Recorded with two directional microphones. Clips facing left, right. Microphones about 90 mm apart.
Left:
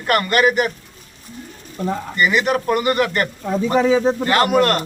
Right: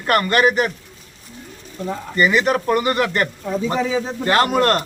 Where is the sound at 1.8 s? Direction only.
50° left (ahead or behind).